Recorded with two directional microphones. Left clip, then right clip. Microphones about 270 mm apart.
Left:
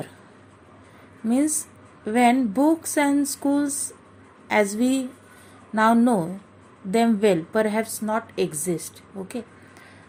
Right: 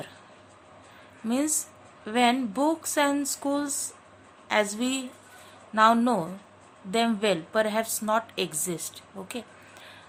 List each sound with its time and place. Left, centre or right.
1.3 s speech: centre